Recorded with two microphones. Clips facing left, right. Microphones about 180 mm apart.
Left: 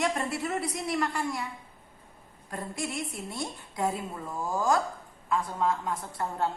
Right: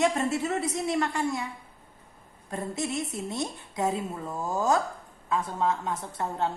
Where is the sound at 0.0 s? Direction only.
20° right (ahead or behind).